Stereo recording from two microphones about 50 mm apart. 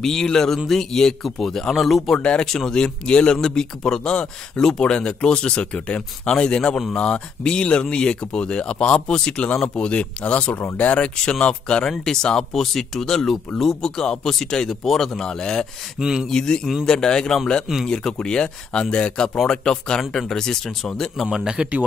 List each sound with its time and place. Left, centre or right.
0.0 s speech: centre
2.1 s speech: left
2.4 s speech: centre; by 11.1 s left
11.2 s speech: centre
16.0 s speech: centre
16.3 s speech: centre
21.3 s speech: centre